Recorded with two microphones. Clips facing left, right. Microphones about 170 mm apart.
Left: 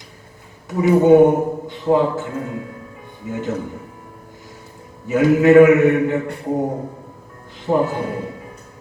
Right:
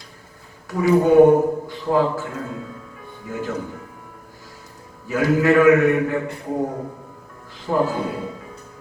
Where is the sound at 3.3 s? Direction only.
20° left (ahead or behind).